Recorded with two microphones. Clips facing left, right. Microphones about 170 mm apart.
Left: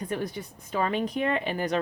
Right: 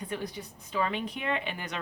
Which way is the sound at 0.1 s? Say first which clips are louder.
Left 4 dB; 50° left (ahead or behind).